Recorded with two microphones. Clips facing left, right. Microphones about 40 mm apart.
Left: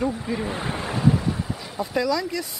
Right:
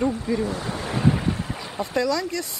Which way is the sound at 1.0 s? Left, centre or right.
Right.